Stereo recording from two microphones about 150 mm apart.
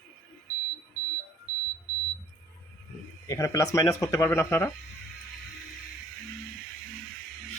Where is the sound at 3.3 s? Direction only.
20° left (ahead or behind).